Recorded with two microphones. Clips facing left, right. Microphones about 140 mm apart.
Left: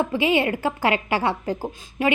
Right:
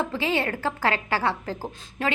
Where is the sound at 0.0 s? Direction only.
15° left (ahead or behind).